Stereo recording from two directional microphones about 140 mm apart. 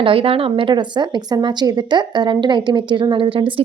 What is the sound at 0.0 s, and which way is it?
A woman's voice, 40° right (ahead or behind).